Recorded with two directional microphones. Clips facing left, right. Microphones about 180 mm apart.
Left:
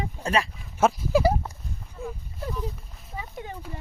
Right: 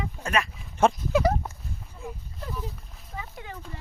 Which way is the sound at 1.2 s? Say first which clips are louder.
Left 2 dB; 10° left (ahead or behind).